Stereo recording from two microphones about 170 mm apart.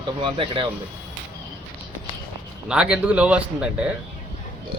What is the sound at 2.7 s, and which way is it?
Speech, 5° right (ahead or behind).